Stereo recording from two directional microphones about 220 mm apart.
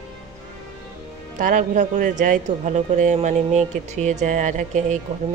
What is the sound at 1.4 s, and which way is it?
Speech, 35° right (ahead or behind).